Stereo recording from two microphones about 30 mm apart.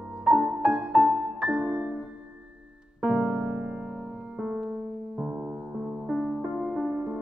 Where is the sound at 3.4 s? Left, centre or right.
Right.